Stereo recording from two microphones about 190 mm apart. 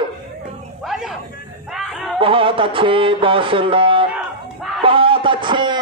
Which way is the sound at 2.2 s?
30° right (ahead or behind).